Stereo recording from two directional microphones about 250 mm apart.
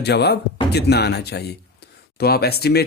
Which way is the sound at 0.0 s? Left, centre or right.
Left.